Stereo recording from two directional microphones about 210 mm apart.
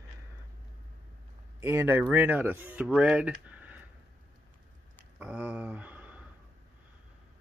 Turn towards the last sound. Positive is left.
turn(degrees=-5)  # may be behind; listen again after turning